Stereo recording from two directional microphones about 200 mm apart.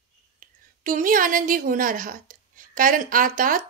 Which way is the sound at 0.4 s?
40° right (ahead or behind).